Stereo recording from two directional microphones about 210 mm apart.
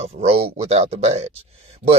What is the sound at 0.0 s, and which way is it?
Speech, 30° right (ahead or behind).